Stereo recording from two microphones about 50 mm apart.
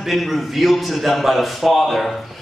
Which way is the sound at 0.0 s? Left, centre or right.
Centre.